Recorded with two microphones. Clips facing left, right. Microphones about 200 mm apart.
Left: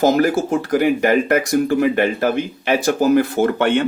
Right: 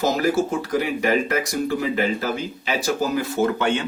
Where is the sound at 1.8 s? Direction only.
60° left (ahead or behind).